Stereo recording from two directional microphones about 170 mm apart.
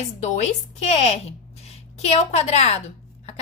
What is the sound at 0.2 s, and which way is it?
A woman's voice, 40° left (ahead or behind).